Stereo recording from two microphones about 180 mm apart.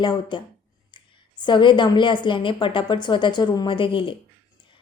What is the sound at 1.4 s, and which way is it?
A woman's voice, 25° left (ahead or behind).